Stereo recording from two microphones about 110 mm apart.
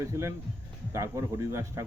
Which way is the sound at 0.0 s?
25° right (ahead or behind).